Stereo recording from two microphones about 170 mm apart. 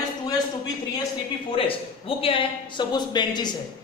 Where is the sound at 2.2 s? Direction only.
30° left (ahead or behind).